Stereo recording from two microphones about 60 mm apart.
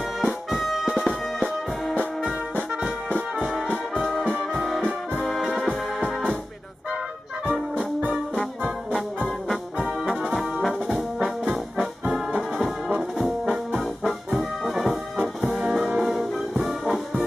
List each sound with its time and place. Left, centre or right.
0.2 s music: centre
1.0 s music: centre
3.2 s music: centre
4.6 s brass instrument: centre
5.2 s music: centre
9.5 s brass instrument: centre
15.1 s music: centre
16.0 s brass instrument: centre